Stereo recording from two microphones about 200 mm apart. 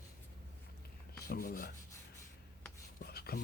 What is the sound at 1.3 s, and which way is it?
Speech, 45° left (ahead or behind).